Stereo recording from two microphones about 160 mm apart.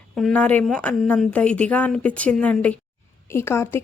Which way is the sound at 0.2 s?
5° left (ahead or behind).